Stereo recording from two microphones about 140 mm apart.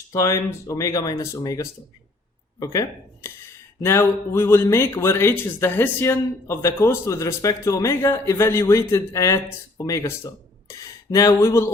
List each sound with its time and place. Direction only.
0.1 s speech: 20° left (ahead or behind)